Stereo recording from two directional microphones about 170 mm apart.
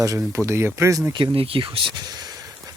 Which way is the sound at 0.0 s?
15° right (ahead or behind).